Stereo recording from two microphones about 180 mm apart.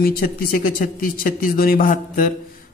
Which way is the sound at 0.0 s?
55° left (ahead or behind).